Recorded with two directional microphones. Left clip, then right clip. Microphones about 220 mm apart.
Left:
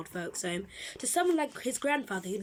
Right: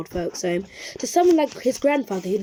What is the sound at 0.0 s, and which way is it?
Speech, 25° right (ahead or behind).